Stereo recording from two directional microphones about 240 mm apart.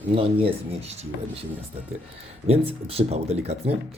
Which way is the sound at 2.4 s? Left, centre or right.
Right.